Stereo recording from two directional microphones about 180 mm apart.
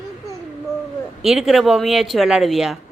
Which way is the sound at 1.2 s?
Centre (ahead or behind).